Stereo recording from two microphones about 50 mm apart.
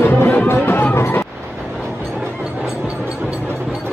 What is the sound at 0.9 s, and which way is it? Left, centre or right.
Vehicle, left.